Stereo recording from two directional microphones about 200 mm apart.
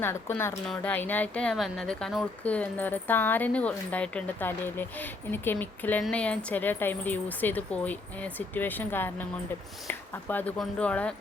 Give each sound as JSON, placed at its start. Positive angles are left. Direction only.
{"t": 0.0, "sound": "speech", "side_deg": 10}